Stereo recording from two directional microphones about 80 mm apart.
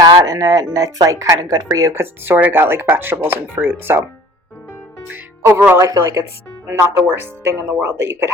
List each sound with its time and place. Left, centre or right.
0.3 s speech: right
2.0 s speech: right
5.0 s speech: right
5.9 s speech: right
6.7 s speech: right